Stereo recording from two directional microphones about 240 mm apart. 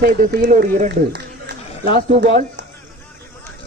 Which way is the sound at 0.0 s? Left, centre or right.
Right.